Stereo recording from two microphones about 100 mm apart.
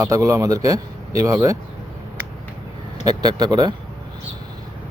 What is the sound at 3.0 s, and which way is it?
Speech, 40° right (ahead or behind).